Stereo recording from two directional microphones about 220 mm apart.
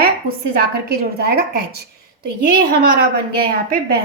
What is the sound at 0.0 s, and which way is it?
A woman's voice, 40° right (ahead or behind).